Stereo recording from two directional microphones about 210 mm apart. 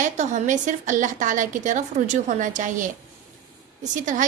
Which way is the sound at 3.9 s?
35° right (ahead or behind).